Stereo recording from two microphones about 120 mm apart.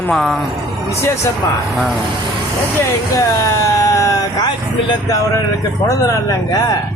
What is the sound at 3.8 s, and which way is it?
Vehicle, 25° left (ahead or behind).